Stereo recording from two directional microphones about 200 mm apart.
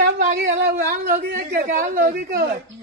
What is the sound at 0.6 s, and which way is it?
A woman's voice, 50° right (ahead or behind).